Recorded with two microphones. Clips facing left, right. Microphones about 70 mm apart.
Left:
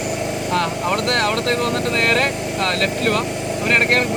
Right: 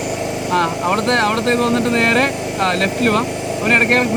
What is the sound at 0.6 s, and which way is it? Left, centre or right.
Speech, right.